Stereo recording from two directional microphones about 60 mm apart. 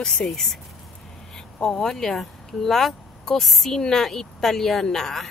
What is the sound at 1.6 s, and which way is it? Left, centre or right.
Speech, centre.